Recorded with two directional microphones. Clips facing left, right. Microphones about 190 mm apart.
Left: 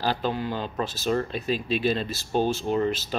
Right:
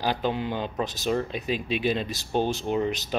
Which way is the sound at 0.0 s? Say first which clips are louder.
Even; 15° right (ahead or behind).